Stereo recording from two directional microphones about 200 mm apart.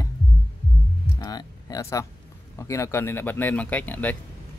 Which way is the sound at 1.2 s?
20° left (ahead or behind).